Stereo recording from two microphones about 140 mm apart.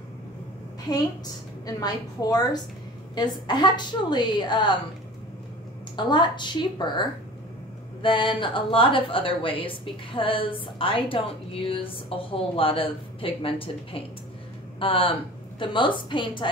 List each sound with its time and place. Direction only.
1.7 s a woman's voice: 25° left (ahead or behind)
5.9 s a woman's voice: 35° left (ahead or behind)